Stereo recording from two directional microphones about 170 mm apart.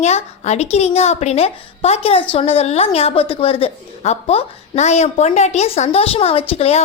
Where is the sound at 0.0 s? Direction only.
40° left (ahead or behind).